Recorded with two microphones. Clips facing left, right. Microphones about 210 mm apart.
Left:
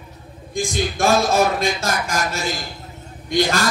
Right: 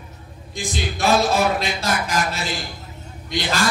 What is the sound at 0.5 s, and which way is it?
A man's voice, 45° left (ahead or behind).